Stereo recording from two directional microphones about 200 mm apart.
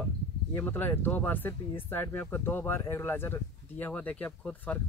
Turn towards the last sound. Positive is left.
turn(degrees=5)  # may be behind; listen again after turning